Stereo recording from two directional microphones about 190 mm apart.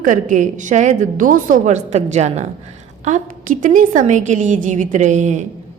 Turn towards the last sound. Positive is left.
turn(degrees=-40)  # may be behind; listen again after turning